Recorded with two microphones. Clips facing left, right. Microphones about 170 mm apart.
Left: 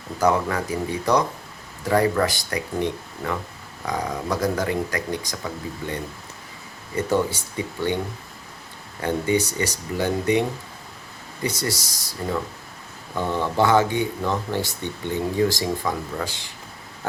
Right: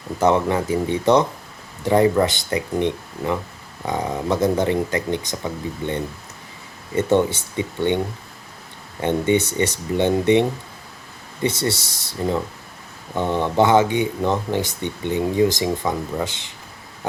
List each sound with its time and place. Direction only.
0.2 s speech: 25° right (ahead or behind)
9.0 s speech: 25° right (ahead or behind)
11.4 s speech: 25° right (ahead or behind)